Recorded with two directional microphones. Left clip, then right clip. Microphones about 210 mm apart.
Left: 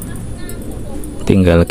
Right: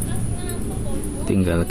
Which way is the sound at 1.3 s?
35° left (ahead or behind).